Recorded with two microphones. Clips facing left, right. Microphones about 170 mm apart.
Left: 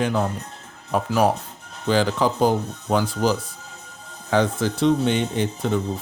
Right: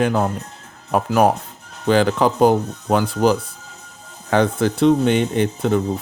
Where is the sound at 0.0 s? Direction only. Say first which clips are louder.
Right 4 dB; 50° right (ahead or behind).